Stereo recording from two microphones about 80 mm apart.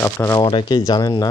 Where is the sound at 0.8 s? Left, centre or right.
Left.